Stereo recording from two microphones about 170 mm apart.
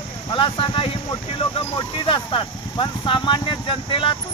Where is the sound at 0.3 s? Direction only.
30° left (ahead or behind).